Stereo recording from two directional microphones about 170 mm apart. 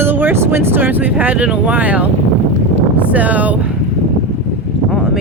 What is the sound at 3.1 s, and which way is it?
Speech, 10° right (ahead or behind).